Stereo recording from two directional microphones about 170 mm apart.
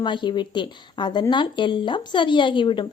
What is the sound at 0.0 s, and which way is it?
A woman's voice, 25° left (ahead or behind).